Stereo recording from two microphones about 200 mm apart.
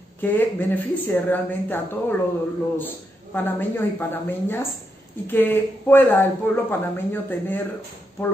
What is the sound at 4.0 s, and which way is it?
A man's voice, 10° left (ahead or behind).